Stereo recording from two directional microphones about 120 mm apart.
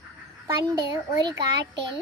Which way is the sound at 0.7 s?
35° right (ahead or behind).